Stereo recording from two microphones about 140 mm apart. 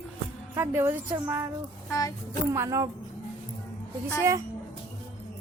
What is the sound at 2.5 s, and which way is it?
Speech, 20° right (ahead or behind).